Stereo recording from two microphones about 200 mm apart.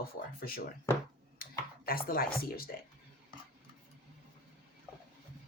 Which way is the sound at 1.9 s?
45° left (ahead or behind).